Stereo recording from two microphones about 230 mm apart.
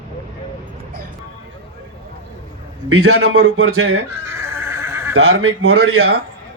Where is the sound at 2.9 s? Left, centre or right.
Right.